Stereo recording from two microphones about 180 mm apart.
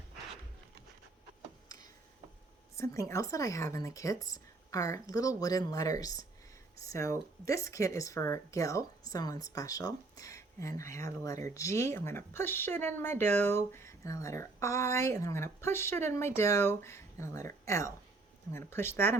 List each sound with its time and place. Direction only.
2.7 s speech: 15° left (ahead or behind)